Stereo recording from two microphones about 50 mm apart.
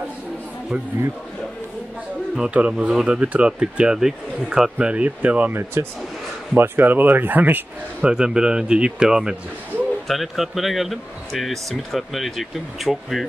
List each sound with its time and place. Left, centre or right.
2.5 s speech: right
4.0 s a man's voice: centre
4.7 s speech: right
5.5 s speech: right
6.6 s speech: right
8.0 s a man's voice: centre
10.0 s speech: centre